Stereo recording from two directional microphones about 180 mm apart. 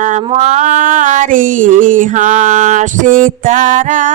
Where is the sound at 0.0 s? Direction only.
40° right (ahead or behind).